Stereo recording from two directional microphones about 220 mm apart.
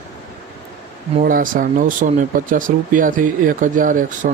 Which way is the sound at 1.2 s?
40° right (ahead or behind).